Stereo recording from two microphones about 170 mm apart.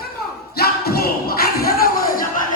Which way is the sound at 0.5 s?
65° left (ahead or behind).